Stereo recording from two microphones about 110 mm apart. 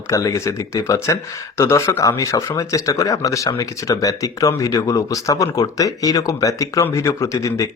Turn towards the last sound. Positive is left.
turn(degrees=30)  # may be behind; listen again after turning